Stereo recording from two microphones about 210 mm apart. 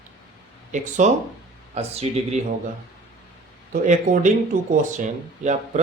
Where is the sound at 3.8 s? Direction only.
40° right (ahead or behind).